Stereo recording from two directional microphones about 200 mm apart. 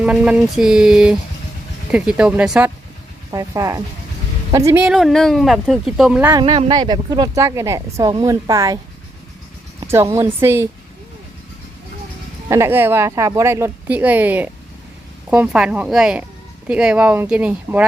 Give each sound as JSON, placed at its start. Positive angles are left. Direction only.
{"t": 0.0, "sound": "speech", "side_deg": -5}
{"t": 3.3, "sound": "speech", "side_deg": -15}
{"t": 6.4, "sound": "a woman's voice", "side_deg": -25}
{"t": 9.8, "sound": "speech", "side_deg": -15}
{"t": 12.5, "sound": "speech", "side_deg": -10}